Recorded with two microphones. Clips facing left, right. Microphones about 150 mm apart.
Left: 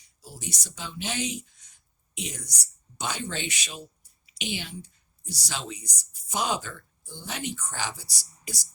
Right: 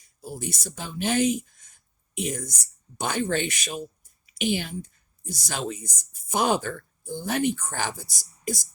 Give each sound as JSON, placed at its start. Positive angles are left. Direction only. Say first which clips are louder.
{"t": 0.0, "sound": "speech", "louder": "right 7 dB", "side_deg": -50}